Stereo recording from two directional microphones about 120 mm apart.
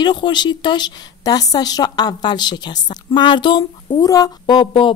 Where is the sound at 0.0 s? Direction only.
40° left (ahead or behind).